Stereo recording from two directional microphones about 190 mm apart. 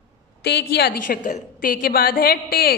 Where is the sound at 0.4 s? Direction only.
60° left (ahead or behind).